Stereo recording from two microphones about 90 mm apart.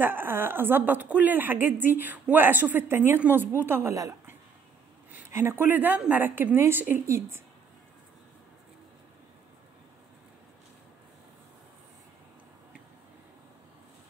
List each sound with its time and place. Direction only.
0.0 s a woman's voice: 25° right (ahead or behind)
5.3 s a woman's voice: 30° right (ahead or behind)